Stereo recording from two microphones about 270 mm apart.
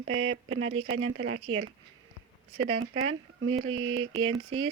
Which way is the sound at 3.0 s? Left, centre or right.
Right.